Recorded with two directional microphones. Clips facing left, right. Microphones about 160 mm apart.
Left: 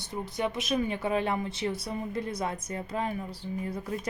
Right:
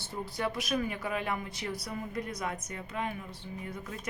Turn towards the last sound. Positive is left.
turn(degrees=35)  # may be behind; listen again after turning